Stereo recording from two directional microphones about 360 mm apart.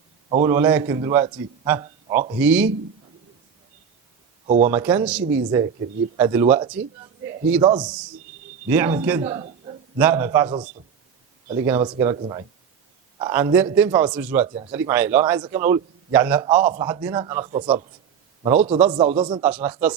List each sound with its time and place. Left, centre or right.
0.3 s a man's voice: centre
4.4 s speech: centre
4.7 s a man's voice: centre
5.2 s a woman's voice: right
6.1 s a man's voice: centre
16.6 s a man's voice: centre